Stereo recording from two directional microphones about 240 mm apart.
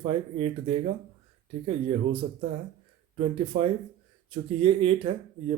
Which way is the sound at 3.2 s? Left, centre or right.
Right.